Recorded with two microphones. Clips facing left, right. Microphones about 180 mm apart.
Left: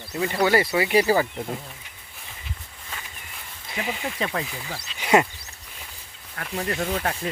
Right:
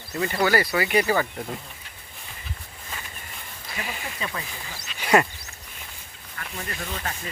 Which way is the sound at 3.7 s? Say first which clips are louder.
Left 5 dB; 20° left (ahead or behind).